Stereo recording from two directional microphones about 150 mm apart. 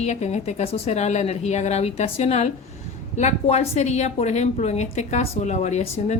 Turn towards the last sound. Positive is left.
turn(degrees=50)  # may be behind; listen again after turning